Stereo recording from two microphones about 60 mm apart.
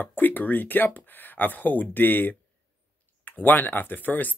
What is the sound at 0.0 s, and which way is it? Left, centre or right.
Speech, left.